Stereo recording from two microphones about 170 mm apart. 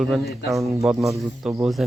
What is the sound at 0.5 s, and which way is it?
Speech, 20° right (ahead or behind).